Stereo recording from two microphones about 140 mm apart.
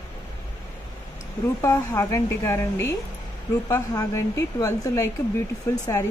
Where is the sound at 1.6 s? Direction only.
25° left (ahead or behind).